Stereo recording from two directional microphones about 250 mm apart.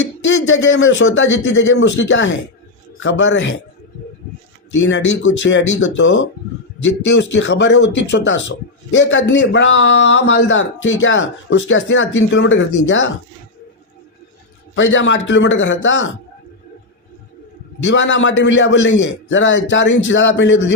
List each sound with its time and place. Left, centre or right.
0.4 s a man's voice: left
4.8 s a man's voice: left
14.8 s a man's voice: left
17.8 s a man's voice: left